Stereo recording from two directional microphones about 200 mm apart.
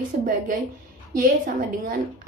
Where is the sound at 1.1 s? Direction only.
45° right (ahead or behind).